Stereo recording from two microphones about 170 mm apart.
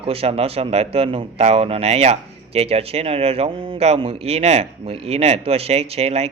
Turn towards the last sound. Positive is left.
turn(degrees=-40)  # may be behind; listen again after turning